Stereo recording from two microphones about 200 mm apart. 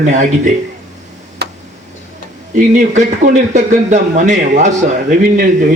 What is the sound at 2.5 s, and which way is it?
A man's voice, 35° right (ahead or behind).